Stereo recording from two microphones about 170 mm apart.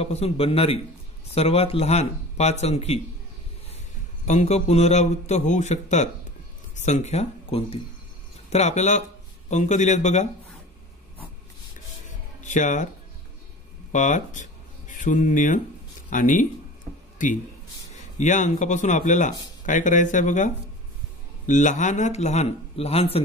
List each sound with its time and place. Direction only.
0.0 s a man's voice: 35° left (ahead or behind)
4.3 s a man's voice: 40° left (ahead or behind)
12.4 s speech: 45° left (ahead or behind)
13.9 s a man's voice: 45° left (ahead or behind)